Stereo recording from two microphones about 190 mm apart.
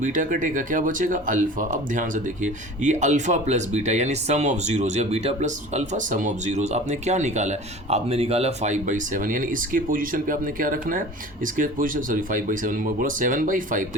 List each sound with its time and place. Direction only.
0.0 s speech: 45° right (ahead or behind)